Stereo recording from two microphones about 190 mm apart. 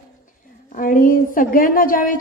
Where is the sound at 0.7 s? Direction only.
45° left (ahead or behind).